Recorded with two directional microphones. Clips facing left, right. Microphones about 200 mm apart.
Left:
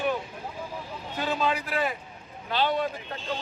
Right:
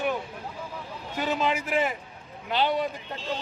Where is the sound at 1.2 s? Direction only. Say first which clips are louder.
Right 1 dB; 15° right (ahead or behind).